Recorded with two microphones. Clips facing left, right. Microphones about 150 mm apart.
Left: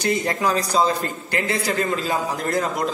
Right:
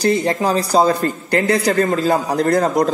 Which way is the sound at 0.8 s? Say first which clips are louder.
Right 6 dB; 45° right (ahead or behind).